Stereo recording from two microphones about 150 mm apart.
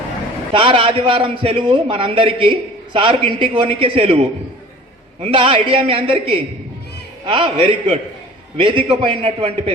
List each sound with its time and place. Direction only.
0.5 s a man's voice: 35° right (ahead or behind)